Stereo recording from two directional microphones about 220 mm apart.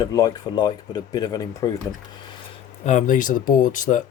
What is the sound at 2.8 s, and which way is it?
Speech, 35° left (ahead or behind).